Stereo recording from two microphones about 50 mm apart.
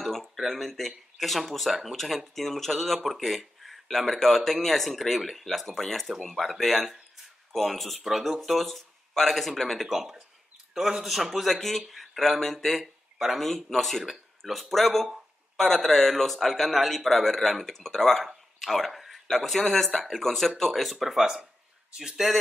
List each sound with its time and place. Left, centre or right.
0.0 s speech: centre
12.8 s a sound: centre
13.7 s speech: centre